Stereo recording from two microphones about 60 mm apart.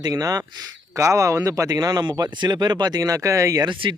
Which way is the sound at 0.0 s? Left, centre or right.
Right.